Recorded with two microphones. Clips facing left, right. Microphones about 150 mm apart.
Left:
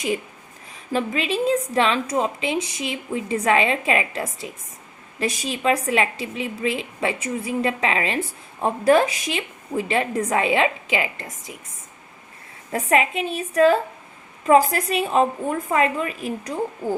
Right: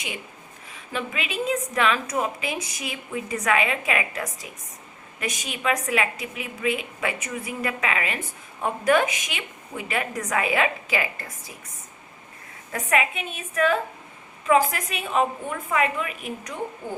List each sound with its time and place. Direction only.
0.7 s a woman's voice: 35° left (ahead or behind)
12.7 s a woman's voice: 30° left (ahead or behind)